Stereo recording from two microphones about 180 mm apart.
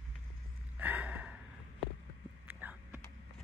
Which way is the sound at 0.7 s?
10° right (ahead or behind).